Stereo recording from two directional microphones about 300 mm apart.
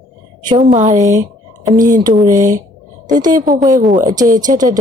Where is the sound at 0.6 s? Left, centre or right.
Right.